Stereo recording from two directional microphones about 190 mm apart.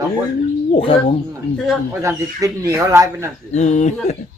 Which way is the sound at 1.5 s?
Centre (ahead or behind).